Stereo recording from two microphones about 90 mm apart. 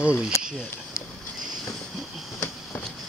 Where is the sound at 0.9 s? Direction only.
35° left (ahead or behind).